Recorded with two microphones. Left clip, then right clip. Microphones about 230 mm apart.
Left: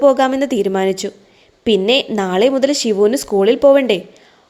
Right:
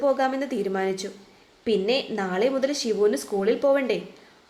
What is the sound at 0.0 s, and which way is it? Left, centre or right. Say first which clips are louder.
A woman's voice: left 11 dB; left.